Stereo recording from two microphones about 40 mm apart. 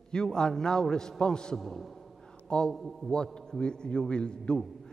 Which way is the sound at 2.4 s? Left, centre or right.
Left.